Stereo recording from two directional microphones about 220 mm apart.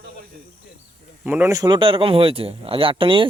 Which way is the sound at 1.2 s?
10° right (ahead or behind).